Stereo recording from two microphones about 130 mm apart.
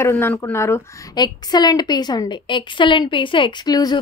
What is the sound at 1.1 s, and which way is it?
A woman's voice, 30° left (ahead or behind).